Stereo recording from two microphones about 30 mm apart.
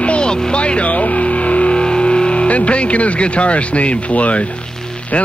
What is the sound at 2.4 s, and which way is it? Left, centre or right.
Speech, left.